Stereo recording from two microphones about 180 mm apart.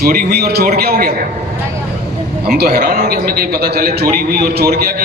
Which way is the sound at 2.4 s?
60° right (ahead or behind).